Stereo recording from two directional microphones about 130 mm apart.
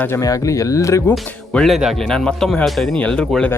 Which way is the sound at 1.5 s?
5° left (ahead or behind).